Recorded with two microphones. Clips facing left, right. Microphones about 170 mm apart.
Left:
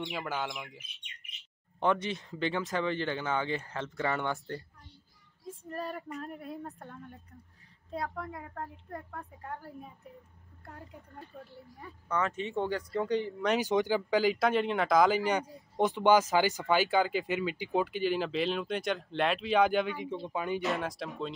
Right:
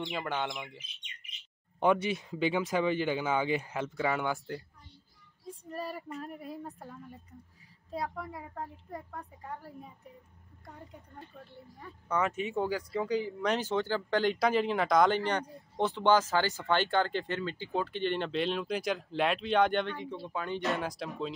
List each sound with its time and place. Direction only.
0.0 s speech: centre (ahead or behind)
1.8 s speech: 10° right (ahead or behind)
5.7 s speech: centre (ahead or behind)
12.1 s speech: 10° right (ahead or behind)
13.6 s speech: 15° left (ahead or behind)
14.2 s speech: centre (ahead or behind)
20.0 s speech: 20° left (ahead or behind)
20.6 s speech: centre (ahead or behind)